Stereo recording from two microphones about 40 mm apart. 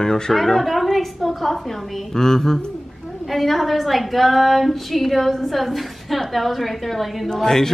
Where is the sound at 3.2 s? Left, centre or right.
Centre.